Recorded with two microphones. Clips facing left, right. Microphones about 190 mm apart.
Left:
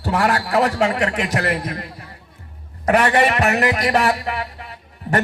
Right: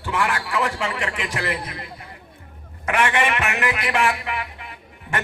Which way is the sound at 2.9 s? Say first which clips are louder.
Left 5 dB; 35° left (ahead or behind).